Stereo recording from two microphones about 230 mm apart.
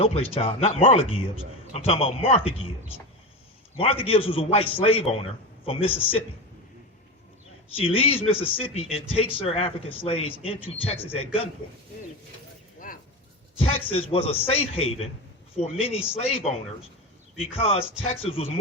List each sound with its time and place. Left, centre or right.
0.0 s a man's voice: left
7.8 s a man's voice: left
13.6 s a man's voice: left